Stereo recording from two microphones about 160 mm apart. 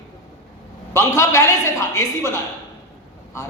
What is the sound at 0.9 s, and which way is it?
A man's voice, 20° left (ahead or behind).